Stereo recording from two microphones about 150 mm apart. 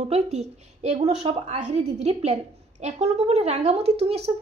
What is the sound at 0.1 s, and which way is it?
A woman's voice, 45° right (ahead or behind).